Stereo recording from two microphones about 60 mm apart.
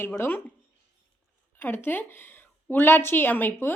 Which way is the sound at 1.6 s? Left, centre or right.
Left.